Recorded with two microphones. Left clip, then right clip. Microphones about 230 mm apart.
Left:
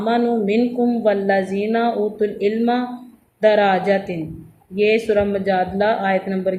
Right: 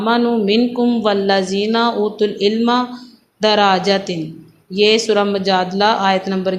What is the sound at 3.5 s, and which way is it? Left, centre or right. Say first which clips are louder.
Speech: right 6 dB; centre.